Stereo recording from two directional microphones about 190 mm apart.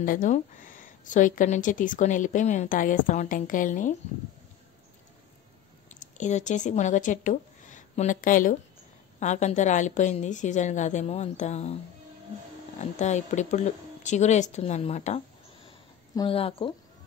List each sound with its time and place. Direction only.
0.0 s a woman's voice: 45° left (ahead or behind)
5.9 s a woman's voice: 40° left (ahead or behind)
13.0 s a woman's voice: 40° left (ahead or behind)